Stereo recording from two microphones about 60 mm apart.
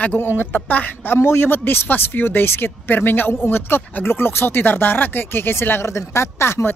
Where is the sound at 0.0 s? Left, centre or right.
Left.